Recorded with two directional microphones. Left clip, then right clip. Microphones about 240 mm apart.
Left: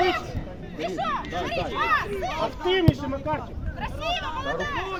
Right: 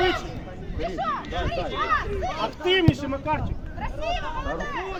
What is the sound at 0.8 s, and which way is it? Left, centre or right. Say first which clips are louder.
Speech: even; left.